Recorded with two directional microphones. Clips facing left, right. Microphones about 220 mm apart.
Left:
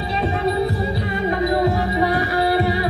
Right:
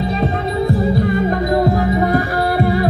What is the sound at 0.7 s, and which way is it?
Music, 50° right (ahead or behind).